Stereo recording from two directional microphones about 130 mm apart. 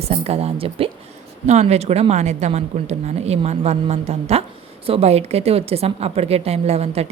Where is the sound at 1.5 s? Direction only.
55° right (ahead or behind).